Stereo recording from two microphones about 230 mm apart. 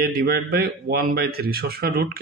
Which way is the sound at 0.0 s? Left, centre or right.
Right.